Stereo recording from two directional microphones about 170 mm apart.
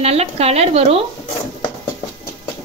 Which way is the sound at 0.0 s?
40° right (ahead or behind).